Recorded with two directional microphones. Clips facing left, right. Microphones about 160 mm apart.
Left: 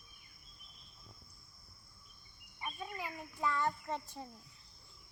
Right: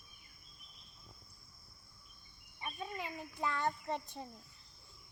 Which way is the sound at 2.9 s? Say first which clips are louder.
Right 1 dB; 20° right (ahead or behind).